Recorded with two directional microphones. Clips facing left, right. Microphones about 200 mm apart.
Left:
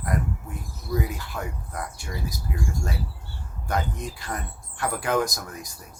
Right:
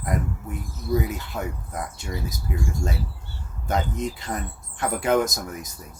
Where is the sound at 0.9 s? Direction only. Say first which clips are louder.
Right 3 dB; 20° right (ahead or behind).